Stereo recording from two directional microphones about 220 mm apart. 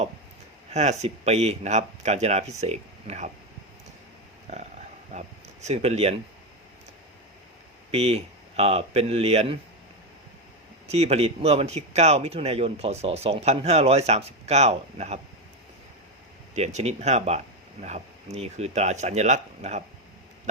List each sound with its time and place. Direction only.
0.7 s speech: 30° right (ahead or behind)
4.5 s speech: 30° right (ahead or behind)
7.9 s speech: 30° right (ahead or behind)
10.8 s speech: 30° right (ahead or behind)
16.6 s speech: 30° right (ahead or behind)